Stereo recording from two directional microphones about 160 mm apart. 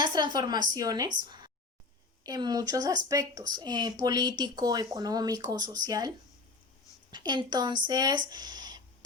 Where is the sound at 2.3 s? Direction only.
25° right (ahead or behind).